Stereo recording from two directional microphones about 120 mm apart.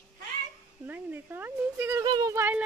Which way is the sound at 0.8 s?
15° right (ahead or behind).